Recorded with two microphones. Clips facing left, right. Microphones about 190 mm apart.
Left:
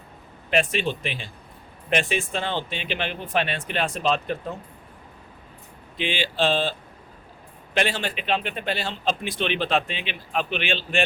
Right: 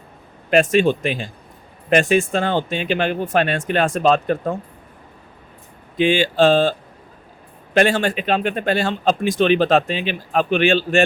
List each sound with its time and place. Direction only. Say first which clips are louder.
0.5 s a man's voice: right 9 dB; 45° right (ahead or behind)
6.0 s a man's voice: right 10 dB; 45° right (ahead or behind)